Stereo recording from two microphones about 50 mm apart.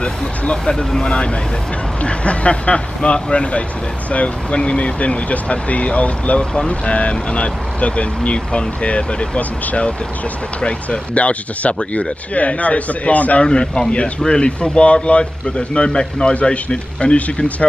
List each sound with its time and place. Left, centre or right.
0.0 s speech: left
13.5 s speech: centre